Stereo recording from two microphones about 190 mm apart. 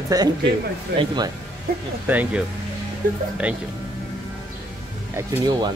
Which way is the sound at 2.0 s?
10° right (ahead or behind).